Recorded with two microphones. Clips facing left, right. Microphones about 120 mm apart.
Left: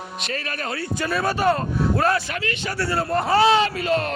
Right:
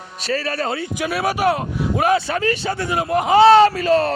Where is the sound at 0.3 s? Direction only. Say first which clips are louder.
Right 8 dB; 30° right (ahead or behind).